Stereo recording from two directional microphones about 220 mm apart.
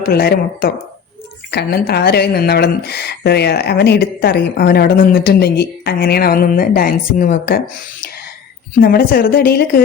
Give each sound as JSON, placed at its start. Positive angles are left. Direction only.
{"t": 0.1, "sound": "speech", "side_deg": 45}
{"t": 8.8, "sound": "speech", "side_deg": 45}